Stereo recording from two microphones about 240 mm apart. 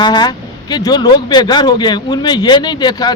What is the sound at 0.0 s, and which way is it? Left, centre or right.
Speech, centre.